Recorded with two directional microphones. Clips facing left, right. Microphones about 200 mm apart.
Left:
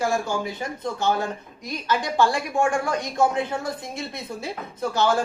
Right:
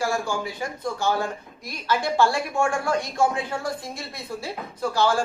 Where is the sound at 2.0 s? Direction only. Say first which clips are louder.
Right 1 dB; 15° left (ahead or behind).